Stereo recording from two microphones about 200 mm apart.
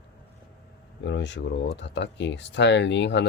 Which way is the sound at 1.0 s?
60° left (ahead or behind).